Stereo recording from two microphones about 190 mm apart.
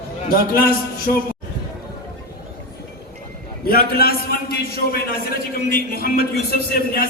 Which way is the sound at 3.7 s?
55° left (ahead or behind).